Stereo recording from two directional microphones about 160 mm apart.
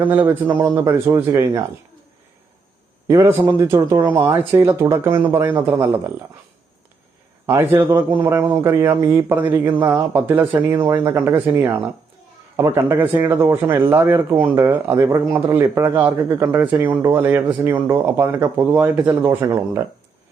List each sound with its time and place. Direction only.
0.0 s speech: 10° right (ahead or behind)
3.1 s speech: 15° right (ahead or behind)
7.4 s speech: 15° right (ahead or behind)